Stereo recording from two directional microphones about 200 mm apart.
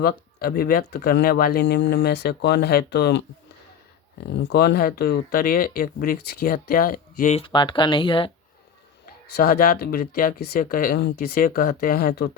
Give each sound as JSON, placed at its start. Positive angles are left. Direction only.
{"t": 0.0, "sound": "speech", "side_deg": 50}
{"t": 4.4, "sound": "speech", "side_deg": 55}
{"t": 9.3, "sound": "speech", "side_deg": 45}